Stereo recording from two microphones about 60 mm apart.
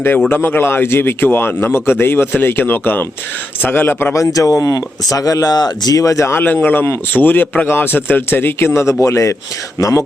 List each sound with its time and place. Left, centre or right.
0.4 s speech: left
4.1 s speech: left
6.3 s speech: left